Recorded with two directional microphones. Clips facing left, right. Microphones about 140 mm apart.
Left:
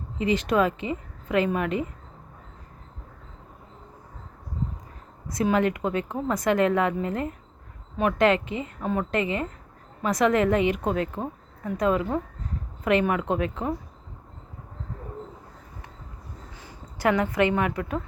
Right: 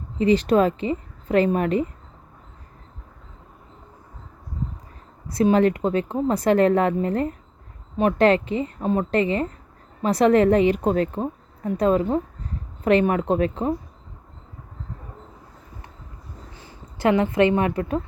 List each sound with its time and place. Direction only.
0.2 s speech: 35° right (ahead or behind)
5.3 s speech: 30° right (ahead or behind)
17.0 s a woman's voice: 25° right (ahead or behind)